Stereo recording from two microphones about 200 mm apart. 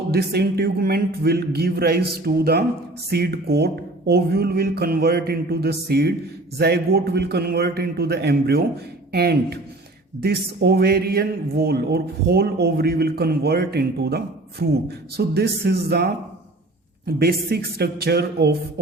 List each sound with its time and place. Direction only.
0.1 s a man's voice: 55° right (ahead or behind)
17.1 s a man's voice: 50° right (ahead or behind)